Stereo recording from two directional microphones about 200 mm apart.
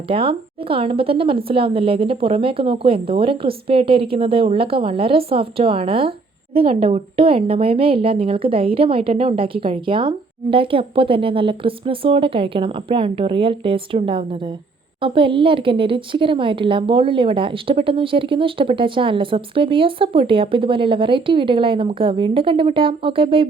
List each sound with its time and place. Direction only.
0.1 s speech: 25° right (ahead or behind)